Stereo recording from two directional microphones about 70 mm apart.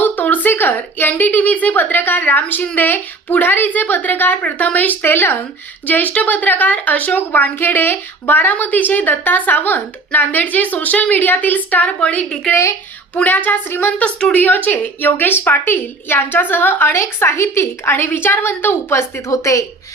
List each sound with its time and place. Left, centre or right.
0.0 s a woman's voice: left
14.0 s a woman's voice: centre
14.4 s a woman's voice: left
19.3 s speech: left